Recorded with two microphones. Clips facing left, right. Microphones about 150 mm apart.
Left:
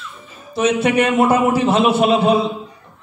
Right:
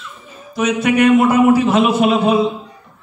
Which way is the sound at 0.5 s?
30° left (ahead or behind).